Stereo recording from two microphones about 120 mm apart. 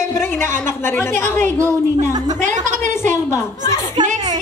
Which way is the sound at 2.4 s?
90° right.